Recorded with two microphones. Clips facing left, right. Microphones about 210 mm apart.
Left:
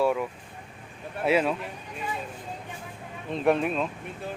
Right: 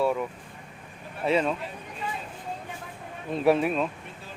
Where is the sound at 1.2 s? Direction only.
5° left (ahead or behind).